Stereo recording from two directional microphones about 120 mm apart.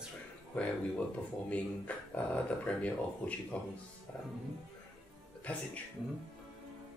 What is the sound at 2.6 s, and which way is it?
Speech, 10° left (ahead or behind).